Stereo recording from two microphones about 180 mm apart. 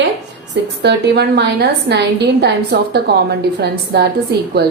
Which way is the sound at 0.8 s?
70° right (ahead or behind).